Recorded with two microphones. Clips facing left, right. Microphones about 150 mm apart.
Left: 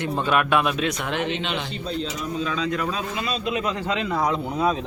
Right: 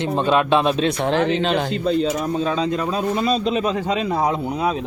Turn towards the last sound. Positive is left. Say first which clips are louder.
# right 2 dB
turn(degrees=-15)  # may be behind; listen again after turning